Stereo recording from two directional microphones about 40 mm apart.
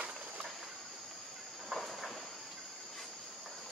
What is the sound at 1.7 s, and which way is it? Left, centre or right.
Train, centre.